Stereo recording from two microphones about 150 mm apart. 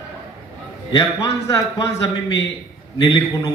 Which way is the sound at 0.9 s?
25° left (ahead or behind).